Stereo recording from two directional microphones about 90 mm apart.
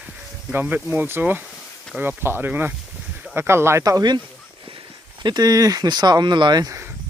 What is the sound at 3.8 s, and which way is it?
Speech, 45° right (ahead or behind).